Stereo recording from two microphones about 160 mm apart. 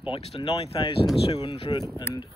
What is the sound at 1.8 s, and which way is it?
Speech, 15° left (ahead or behind).